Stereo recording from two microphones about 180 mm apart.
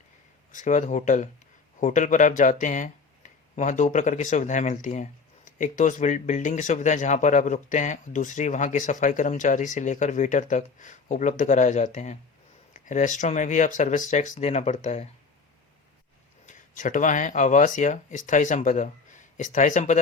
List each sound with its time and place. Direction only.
0.5 s speech: 45° left (ahead or behind)
16.5 s speech: 45° left (ahead or behind)